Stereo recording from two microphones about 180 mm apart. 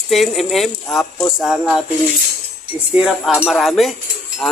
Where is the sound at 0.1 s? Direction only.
Centre (ahead or behind).